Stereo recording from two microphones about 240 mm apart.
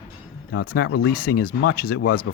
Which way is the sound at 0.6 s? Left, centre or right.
Left.